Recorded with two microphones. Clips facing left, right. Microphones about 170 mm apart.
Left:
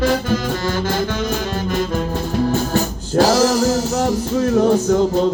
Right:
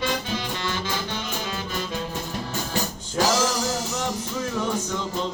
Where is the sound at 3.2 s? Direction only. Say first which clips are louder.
Left 8 dB; 40° left (ahead or behind).